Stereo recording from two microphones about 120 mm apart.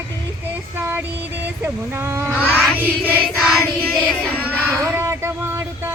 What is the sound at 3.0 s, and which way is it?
Music, 15° right (ahead or behind).